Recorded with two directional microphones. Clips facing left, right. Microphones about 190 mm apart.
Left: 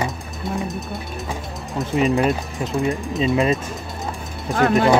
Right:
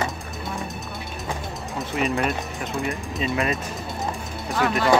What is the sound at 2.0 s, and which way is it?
Speech, 30° left (ahead or behind).